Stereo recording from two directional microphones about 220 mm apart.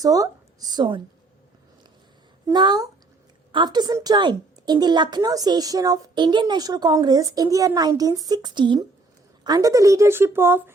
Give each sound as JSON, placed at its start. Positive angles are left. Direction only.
{"t": 0.0, "sound": "a woman's voice", "side_deg": -15}
{"t": 2.5, "sound": "a woman's voice", "side_deg": -20}